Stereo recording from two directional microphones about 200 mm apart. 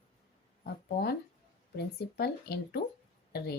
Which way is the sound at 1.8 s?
50° left (ahead or behind).